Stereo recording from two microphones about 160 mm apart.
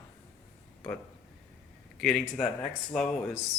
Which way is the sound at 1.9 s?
5° left (ahead or behind).